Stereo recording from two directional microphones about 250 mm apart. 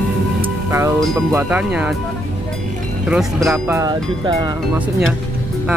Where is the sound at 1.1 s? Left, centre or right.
Centre.